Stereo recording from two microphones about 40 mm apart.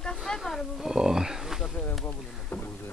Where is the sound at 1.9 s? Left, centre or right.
Left.